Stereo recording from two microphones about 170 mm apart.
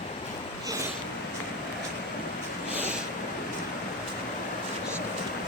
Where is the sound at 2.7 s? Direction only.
10° right (ahead or behind).